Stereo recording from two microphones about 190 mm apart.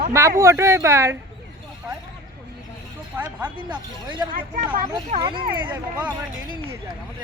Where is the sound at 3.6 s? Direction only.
25° right (ahead or behind).